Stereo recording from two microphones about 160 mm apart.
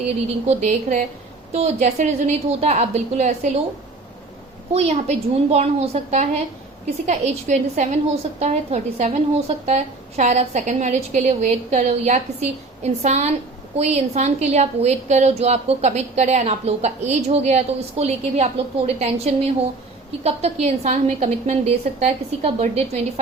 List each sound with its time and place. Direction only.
0.4 s a woman's voice: 50° right (ahead or behind)
4.7 s a woman's voice: 40° right (ahead or behind)